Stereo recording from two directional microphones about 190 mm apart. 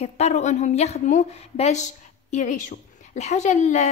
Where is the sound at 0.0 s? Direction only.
35° left (ahead or behind).